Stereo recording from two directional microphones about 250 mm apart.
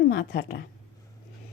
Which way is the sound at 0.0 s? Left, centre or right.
Left.